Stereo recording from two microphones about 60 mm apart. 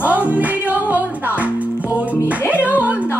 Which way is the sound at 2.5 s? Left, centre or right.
Right.